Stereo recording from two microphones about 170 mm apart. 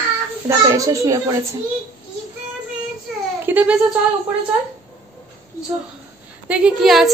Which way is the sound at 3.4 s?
10° right (ahead or behind).